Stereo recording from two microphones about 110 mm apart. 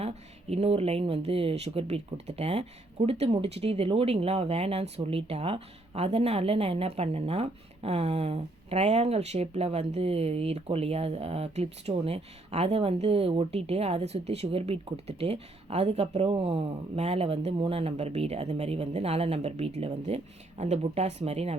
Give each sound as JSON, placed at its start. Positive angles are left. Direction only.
{"t": 0.0, "sound": "speech", "side_deg": -70}